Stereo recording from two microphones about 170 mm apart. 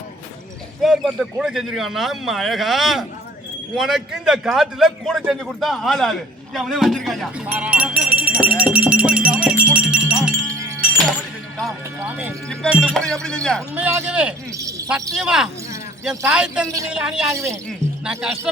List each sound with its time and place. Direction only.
0.8 s a man's voice: centre (ahead or behind)
9.6 s music: 5° right (ahead or behind)
10.5 s wind chime: 15° right (ahead or behind)
11.9 s a man's voice: 10° right (ahead or behind)
13.7 s speech: 10° right (ahead or behind)
14.5 s speech: 20° right (ahead or behind)
14.8 s a man's voice: centre (ahead or behind)
17.3 s speech: 15° right (ahead or behind)
18.0 s a man's voice: 5° right (ahead or behind)